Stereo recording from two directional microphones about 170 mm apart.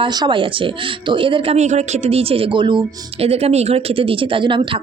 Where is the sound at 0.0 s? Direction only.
25° right (ahead or behind).